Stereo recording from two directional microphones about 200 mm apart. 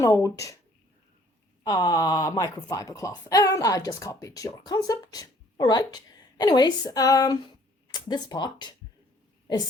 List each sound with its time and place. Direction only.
0.0 s speech: 15° left (ahead or behind)
1.6 s speech: 20° left (ahead or behind)